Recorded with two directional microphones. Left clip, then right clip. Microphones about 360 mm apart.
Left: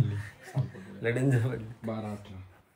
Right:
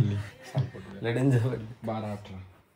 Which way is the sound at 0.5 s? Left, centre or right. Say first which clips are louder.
Right 4 dB; right.